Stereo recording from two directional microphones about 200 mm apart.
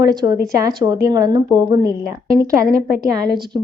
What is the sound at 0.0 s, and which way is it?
Speech, 20° right (ahead or behind).